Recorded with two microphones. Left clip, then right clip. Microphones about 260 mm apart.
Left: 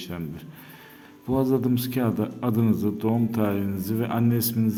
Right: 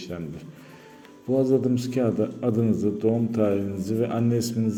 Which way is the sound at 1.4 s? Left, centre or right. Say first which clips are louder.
Right 1 dB; centre.